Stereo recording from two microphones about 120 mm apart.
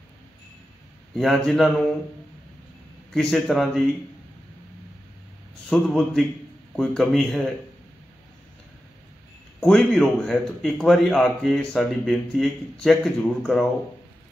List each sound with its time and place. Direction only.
1.1 s a man's voice: centre (ahead or behind)
3.1 s a man's voice: 5° left (ahead or behind)
5.7 s a man's voice: centre (ahead or behind)
9.6 s a man's voice: 5° left (ahead or behind)